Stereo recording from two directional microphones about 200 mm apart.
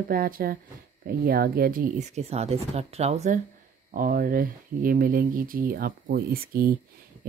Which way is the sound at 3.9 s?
45° right (ahead or behind).